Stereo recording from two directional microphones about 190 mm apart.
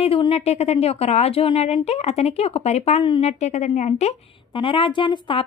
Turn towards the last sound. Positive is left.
turn(degrees=25)  # may be behind; listen again after turning